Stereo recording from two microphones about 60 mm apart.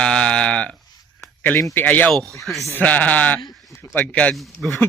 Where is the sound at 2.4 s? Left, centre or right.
Centre.